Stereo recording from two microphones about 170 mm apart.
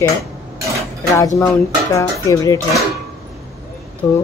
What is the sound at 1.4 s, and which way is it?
Speech, 20° left (ahead or behind).